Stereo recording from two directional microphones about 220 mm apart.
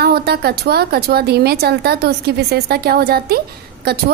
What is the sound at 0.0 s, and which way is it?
A woman's voice, 45° right (ahead or behind).